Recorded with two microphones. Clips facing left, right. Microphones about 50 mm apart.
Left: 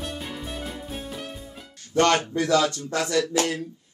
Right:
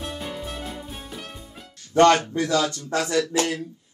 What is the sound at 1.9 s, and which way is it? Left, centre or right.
Speech, right.